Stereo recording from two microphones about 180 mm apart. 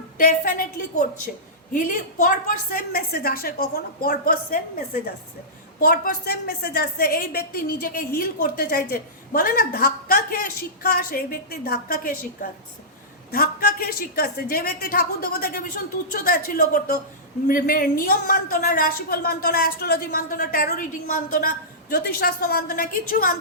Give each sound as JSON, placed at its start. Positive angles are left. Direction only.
{"t": 0.2, "sound": "a woman's voice", "side_deg": 50}
{"t": 5.8, "sound": "a woman's voice", "side_deg": 55}